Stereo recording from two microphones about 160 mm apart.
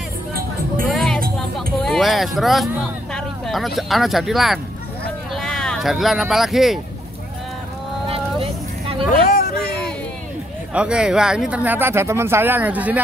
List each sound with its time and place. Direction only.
0.9 s music: 5° left (ahead or behind)
1.8 s speech: centre (ahead or behind)
9.1 s hubbub: 60° left (ahead or behind)
10.7 s speech: 5° right (ahead or behind)